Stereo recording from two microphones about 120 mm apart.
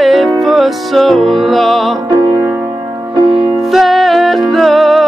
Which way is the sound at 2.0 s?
40° right (ahead or behind).